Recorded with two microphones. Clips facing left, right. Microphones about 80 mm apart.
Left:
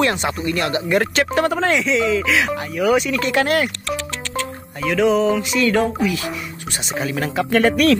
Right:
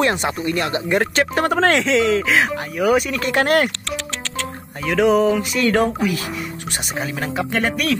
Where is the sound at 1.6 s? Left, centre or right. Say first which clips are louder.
Right 2 dB; right.